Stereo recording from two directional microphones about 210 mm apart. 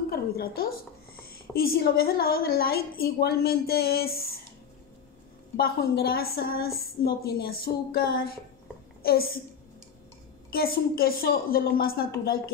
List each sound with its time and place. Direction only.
0.1 s a sound: 45° left (ahead or behind)
1.1 s a woman's voice: 45° left (ahead or behind)
5.6 s a woman's voice: 45° left (ahead or behind)
10.5 s a woman's voice: 45° left (ahead or behind)